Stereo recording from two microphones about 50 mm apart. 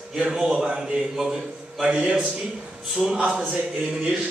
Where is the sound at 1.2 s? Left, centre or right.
Centre.